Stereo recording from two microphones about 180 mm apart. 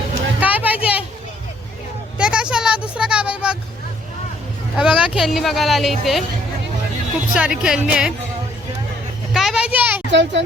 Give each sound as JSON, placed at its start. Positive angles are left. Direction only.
{"t": 0.3, "sound": "a sound", "side_deg": -10}
{"t": 2.1, "sound": "a sound", "side_deg": -5}
{"t": 4.8, "sound": "speech", "side_deg": -5}
{"t": 7.3, "sound": "speech", "side_deg": -5}
{"t": 9.3, "sound": "a child's voice", "side_deg": 0}
{"t": 10.1, "sound": "a child's voice", "side_deg": -80}